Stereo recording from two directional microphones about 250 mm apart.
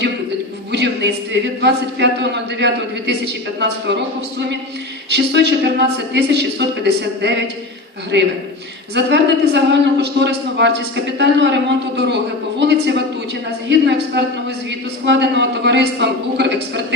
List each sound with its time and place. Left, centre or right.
1.3 s a man's voice: right
9.0 s a man's voice: right